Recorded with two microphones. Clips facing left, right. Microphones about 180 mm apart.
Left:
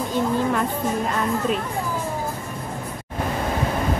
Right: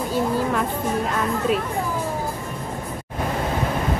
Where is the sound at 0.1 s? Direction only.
5° right (ahead or behind).